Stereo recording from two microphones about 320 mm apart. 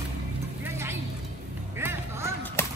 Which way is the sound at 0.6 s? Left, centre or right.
Centre.